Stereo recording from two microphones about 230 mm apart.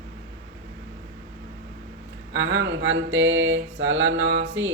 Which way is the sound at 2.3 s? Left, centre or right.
Right.